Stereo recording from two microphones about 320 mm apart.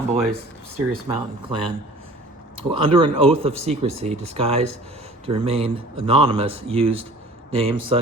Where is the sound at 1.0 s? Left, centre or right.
Centre.